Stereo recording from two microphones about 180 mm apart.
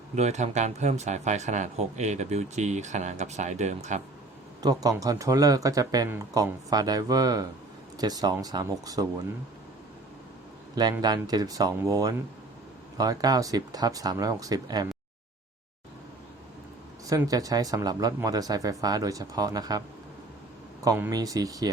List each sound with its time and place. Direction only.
0.2 s speech: 40° right (ahead or behind)
4.6 s speech: 20° right (ahead or behind)
11.0 s speech: 20° right (ahead or behind)
17.1 s speech: 20° right (ahead or behind)
20.8 s speech: 20° right (ahead or behind)